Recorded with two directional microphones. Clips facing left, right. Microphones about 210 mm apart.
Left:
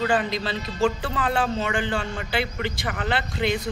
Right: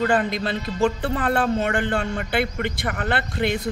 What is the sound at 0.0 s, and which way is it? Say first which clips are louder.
A man's voice: right 2 dB; 50° right (ahead or behind).